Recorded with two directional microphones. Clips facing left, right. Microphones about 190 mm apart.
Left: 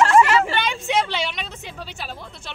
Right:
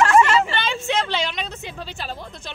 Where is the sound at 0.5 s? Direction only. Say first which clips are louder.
Left 1 dB; 10° left (ahead or behind).